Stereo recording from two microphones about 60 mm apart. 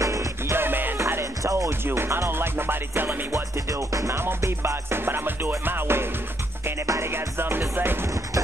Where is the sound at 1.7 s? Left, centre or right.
Right.